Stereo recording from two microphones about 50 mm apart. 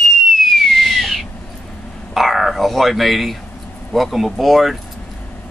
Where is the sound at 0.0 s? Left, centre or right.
Centre.